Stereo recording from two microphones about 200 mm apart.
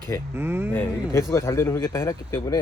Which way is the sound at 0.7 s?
10° left (ahead or behind).